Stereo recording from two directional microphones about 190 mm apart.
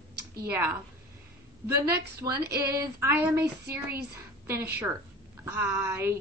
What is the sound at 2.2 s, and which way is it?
Speech, 15° right (ahead or behind).